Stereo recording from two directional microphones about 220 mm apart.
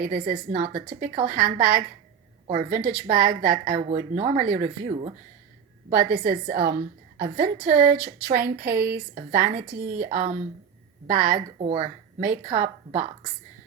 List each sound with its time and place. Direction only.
0.0 s a woman's voice: 40° right (ahead or behind)
5.9 s a woman's voice: 40° right (ahead or behind)
11.3 s a woman's voice: 30° right (ahead or behind)